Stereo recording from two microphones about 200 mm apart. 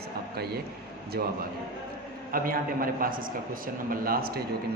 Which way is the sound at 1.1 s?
50° right (ahead or behind).